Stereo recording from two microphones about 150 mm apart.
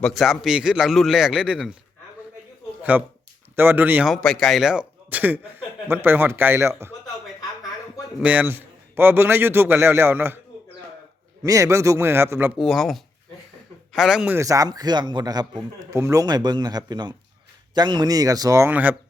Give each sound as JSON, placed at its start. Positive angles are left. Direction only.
{"t": 0.0, "sound": "a man's voice", "side_deg": 0}
{"t": 2.9, "sound": "speech", "side_deg": -10}
{"t": 4.1, "sound": "speech", "side_deg": 0}
{"t": 8.2, "sound": "speech", "side_deg": -10}
{"t": 11.4, "sound": "speech", "side_deg": -20}
{"t": 12.5, "sound": "a man's voice", "side_deg": 0}
{"t": 14.3, "sound": "speech", "side_deg": -20}